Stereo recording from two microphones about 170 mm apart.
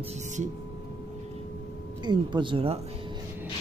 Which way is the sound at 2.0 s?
25° right (ahead or behind).